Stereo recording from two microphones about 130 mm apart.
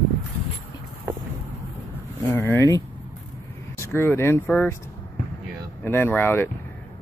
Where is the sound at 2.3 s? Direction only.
20° left (ahead or behind).